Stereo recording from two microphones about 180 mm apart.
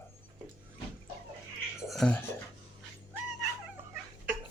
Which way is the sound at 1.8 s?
5° left (ahead or behind).